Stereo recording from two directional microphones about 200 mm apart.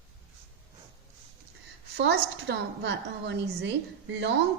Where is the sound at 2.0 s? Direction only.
55° right (ahead or behind).